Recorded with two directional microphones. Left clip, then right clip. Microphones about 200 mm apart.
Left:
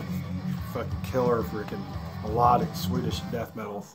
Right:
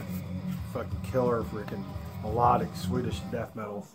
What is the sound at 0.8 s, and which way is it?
Speech, 5° left (ahead or behind).